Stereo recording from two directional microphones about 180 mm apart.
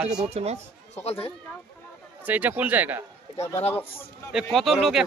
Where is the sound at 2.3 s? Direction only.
10° right (ahead or behind).